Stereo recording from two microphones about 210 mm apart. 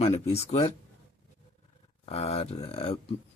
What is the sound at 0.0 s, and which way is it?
Speech, 30° left (ahead or behind).